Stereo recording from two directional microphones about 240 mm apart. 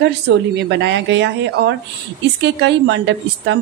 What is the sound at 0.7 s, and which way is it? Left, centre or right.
A woman's voice, right.